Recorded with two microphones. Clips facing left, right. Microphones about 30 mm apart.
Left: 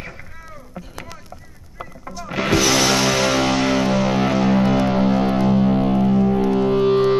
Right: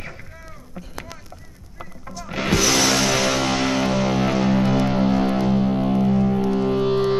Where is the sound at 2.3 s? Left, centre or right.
Centre.